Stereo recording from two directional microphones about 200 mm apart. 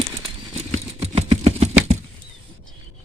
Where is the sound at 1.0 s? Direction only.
30° right (ahead or behind).